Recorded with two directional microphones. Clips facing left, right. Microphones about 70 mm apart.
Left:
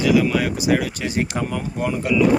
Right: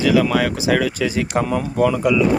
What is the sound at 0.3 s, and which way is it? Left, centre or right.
Speech, right.